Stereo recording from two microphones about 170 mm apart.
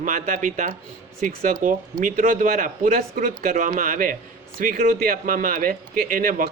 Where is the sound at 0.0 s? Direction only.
55° right (ahead or behind).